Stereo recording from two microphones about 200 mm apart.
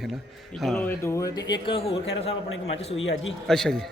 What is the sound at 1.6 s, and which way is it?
Speech, 30° left (ahead or behind).